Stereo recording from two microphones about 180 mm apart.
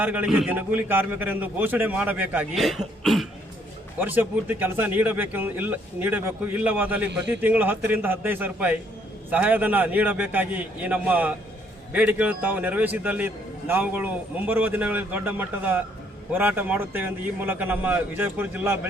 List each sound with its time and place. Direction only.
0.0 s speech: 10° right (ahead or behind)